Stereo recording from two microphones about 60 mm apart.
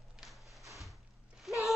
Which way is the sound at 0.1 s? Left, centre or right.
Centre.